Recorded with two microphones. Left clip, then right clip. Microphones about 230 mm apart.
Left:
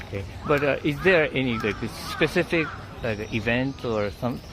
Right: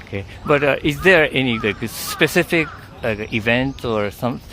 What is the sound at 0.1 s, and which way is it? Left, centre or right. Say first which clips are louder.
Speech: right 6 dB; right.